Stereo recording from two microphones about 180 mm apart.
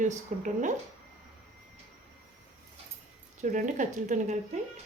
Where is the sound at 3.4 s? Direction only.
45° right (ahead or behind).